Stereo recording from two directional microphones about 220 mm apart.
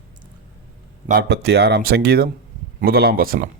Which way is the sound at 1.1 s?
45° right (ahead or behind).